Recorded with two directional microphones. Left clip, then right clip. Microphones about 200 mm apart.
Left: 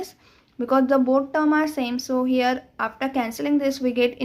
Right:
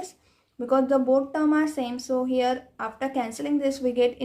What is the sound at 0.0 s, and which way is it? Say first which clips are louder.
A woman's voice: left 4 dB; 30° left (ahead or behind).